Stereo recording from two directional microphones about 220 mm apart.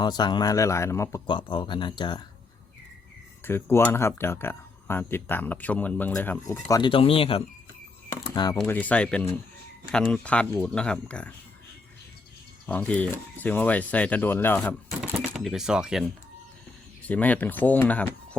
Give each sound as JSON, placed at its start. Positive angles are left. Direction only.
{"t": 0.0, "sound": "speech", "side_deg": 20}
{"t": 3.4, "sound": "speech", "side_deg": 10}
{"t": 8.1, "sound": "a sound", "side_deg": 15}
{"t": 8.5, "sound": "speech", "side_deg": 5}
{"t": 12.6, "sound": "speech", "side_deg": 5}
{"t": 17.1, "sound": "speech", "side_deg": 5}